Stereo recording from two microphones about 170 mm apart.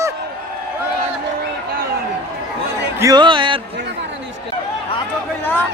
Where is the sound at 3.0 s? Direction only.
20° right (ahead or behind).